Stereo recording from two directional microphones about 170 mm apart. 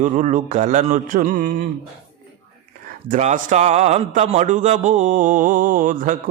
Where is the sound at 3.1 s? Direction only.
50° right (ahead or behind).